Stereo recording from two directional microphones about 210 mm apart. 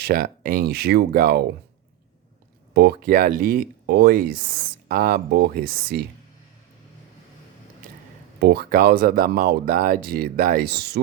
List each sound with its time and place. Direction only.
0.0 s speech: 45° right (ahead or behind)
2.7 s speech: 45° right (ahead or behind)
8.4 s speech: 50° right (ahead or behind)